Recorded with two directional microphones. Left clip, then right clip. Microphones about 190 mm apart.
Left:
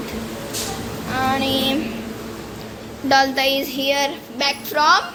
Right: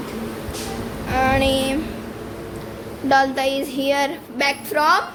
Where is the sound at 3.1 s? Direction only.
15° right (ahead or behind).